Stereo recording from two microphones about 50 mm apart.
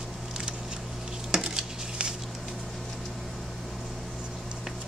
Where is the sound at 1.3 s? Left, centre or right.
Centre.